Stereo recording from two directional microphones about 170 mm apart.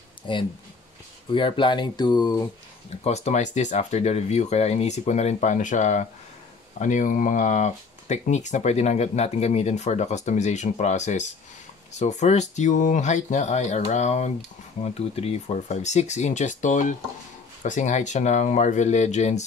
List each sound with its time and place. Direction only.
0.3 s speech: 30° left (ahead or behind)
3.0 s speech: 40° left (ahead or behind)